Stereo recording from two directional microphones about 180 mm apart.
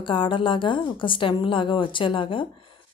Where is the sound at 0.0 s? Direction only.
30° left (ahead or behind).